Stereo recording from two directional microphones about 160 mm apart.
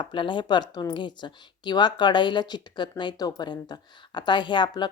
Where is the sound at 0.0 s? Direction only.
30° left (ahead or behind).